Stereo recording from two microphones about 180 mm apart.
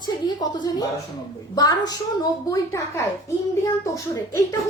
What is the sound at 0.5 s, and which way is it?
A child's voice, 25° left (ahead or behind).